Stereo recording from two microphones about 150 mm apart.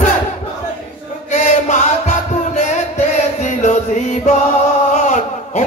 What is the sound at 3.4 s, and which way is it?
Chant, 50° left (ahead or behind).